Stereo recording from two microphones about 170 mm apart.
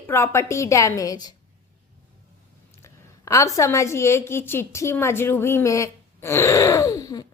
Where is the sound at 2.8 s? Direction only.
15° left (ahead or behind).